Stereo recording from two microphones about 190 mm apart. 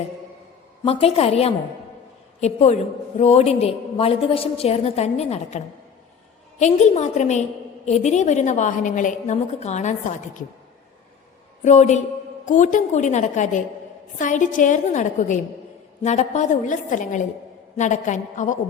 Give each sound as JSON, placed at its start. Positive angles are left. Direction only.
{"t": 0.9, "sound": "a woman's voice", "side_deg": 30}
{"t": 11.6, "sound": "a woman's voice", "side_deg": 40}